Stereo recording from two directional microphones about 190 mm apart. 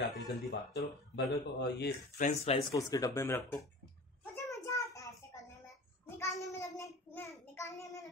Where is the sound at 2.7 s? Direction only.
15° left (ahead or behind).